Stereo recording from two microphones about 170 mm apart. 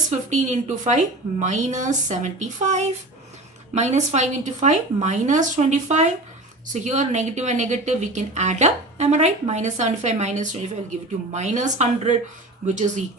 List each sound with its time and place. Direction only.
0.1 s speech: 45° right (ahead or behind)